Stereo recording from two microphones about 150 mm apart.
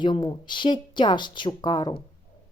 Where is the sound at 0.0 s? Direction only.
30° left (ahead or behind).